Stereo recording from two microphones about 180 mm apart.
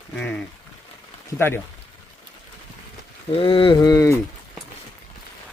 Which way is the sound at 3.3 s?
30° left (ahead or behind).